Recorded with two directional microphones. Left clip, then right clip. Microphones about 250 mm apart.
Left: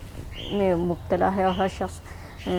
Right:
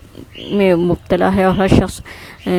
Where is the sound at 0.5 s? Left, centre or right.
Right.